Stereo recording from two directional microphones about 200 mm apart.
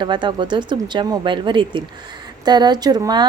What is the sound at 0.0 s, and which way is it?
A woman's voice, 25° right (ahead or behind).